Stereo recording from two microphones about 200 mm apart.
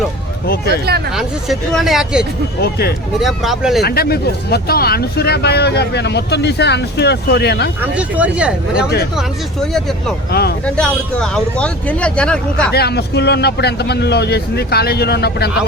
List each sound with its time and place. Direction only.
0.4 s speech: 50° left (ahead or behind)
1.1 s speech: centre (ahead or behind)
2.6 s speech: 50° left (ahead or behind)
3.2 s speech: centre (ahead or behind)
3.8 s speech: 50° left (ahead or behind)
7.8 s speech: 5° right (ahead or behind)
12.7 s speech: 55° left (ahead or behind)